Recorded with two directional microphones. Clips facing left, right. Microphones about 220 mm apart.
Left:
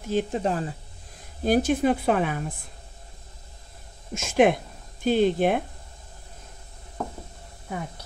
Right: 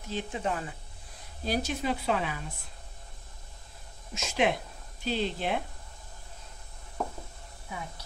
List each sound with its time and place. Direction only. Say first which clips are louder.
0.0 s speech: left 8 dB; 45° left (ahead or behind)
1.4 s a woman's voice: left 10 dB; 50° left (ahead or behind)
4.1 s a woman's voice: left 8 dB; 50° left (ahead or behind)